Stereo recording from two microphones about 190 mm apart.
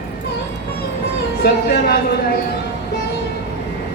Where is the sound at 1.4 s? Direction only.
55° left (ahead or behind).